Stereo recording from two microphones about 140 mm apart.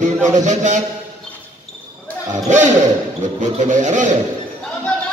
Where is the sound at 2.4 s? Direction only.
60° right (ahead or behind).